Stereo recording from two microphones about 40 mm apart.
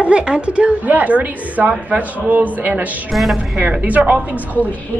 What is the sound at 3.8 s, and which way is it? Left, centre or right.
Speech, right.